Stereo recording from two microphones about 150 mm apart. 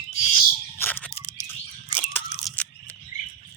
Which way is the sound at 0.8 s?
10° left (ahead or behind).